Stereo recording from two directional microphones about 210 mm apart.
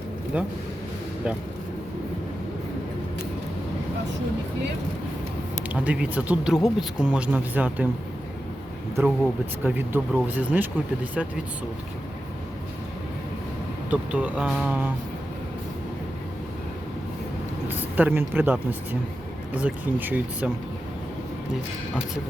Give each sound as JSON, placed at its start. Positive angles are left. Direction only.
{"t": 0.3, "sound": "speech", "side_deg": -5}
{"t": 5.8, "sound": "speech", "side_deg": -5}
{"t": 9.0, "sound": "speech", "side_deg": -10}
{"t": 13.9, "sound": "speech", "side_deg": -5}
{"t": 17.7, "sound": "speech", "side_deg": -10}